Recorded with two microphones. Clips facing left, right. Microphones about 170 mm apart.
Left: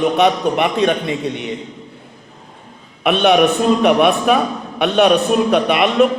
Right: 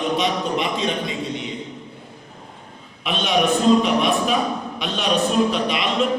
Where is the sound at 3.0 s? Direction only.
60° left (ahead or behind).